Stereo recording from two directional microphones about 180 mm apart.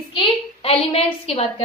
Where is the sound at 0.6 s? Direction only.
35° left (ahead or behind).